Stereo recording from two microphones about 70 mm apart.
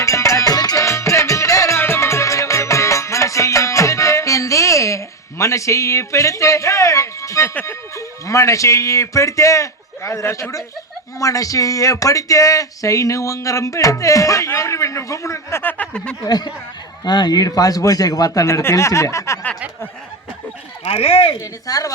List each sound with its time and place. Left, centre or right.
0.0 s music: left
0.9 s music: left
1.8 s music: left
7.6 s speech: left
15.6 s speech: centre
16.2 s speech: left
18.4 s speech: left
21.7 s speech: left